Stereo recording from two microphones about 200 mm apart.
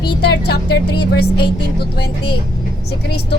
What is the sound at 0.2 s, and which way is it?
A woman's voice, 55° left (ahead or behind).